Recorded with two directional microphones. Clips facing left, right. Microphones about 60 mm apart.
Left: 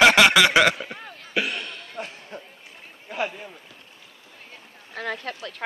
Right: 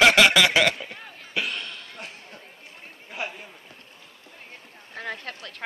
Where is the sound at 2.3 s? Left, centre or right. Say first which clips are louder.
Left 7 dB; centre.